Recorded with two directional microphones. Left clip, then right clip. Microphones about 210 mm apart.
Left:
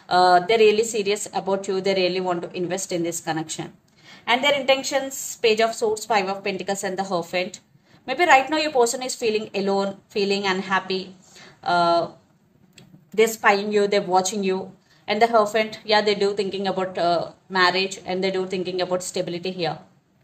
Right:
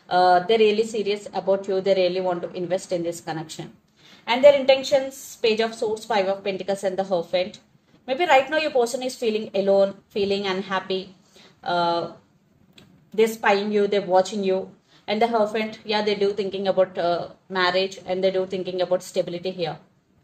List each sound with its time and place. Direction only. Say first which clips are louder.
0.0 s a woman's voice: left 1 dB; 35° left (ahead or behind)
5.5 s a woman's voice: left 3 dB; 35° left (ahead or behind)
13.1 s a woman's voice: left 1 dB; 35° left (ahead or behind)